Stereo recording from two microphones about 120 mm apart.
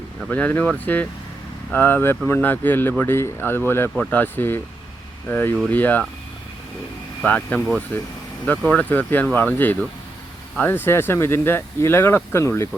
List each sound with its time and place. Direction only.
0.3 s speech: 10° left (ahead or behind)
7.3 s speech: 10° left (ahead or behind)